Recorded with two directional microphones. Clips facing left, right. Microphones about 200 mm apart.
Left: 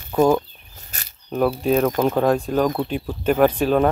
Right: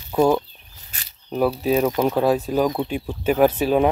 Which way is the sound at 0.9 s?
45° left (ahead or behind).